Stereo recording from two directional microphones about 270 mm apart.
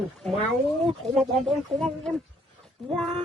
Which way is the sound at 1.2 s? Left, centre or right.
Centre.